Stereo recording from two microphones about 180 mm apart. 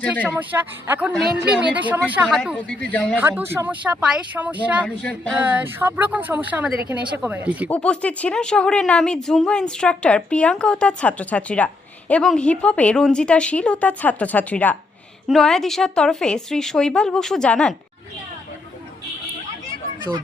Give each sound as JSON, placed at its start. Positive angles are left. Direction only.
{"t": 0.5, "sound": "speech", "side_deg": -15}
{"t": 2.6, "sound": "speech", "side_deg": 10}
{"t": 3.2, "sound": "speech", "side_deg": -10}
{"t": 7.7, "sound": "speech", "side_deg": 5}